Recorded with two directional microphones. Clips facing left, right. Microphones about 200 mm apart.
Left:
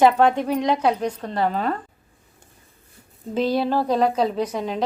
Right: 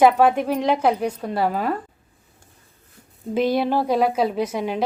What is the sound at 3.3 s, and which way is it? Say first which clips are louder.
A woman's voice: right 1 dB; 10° right (ahead or behind).